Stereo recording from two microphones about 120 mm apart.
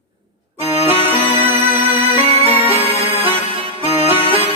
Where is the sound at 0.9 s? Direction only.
55° right (ahead or behind).